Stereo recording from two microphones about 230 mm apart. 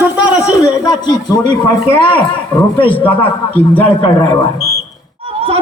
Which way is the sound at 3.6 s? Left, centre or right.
Centre.